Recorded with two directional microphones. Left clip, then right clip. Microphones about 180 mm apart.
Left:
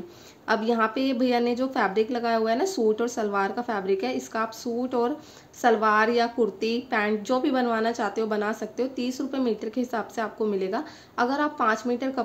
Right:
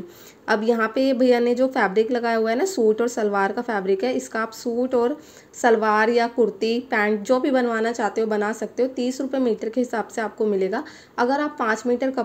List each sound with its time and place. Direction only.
0.5 s a woman's voice: 20° right (ahead or behind)